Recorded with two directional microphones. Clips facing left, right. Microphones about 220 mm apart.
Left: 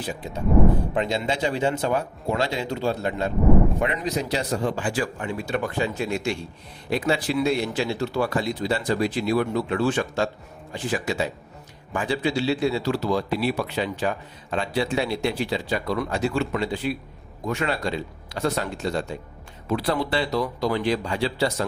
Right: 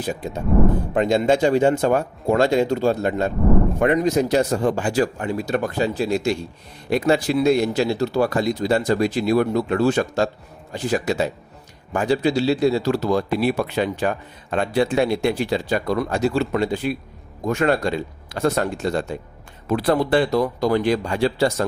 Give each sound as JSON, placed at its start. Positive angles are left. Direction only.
{"t": 0.0, "sound": "a man's voice", "side_deg": -45}